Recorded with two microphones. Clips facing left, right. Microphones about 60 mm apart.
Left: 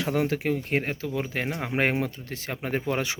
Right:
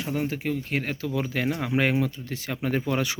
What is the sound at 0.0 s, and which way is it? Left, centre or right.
Speech, left.